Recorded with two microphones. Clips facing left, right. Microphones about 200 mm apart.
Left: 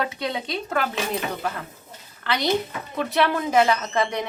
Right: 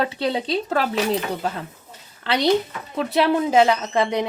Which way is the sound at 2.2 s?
30° right (ahead or behind).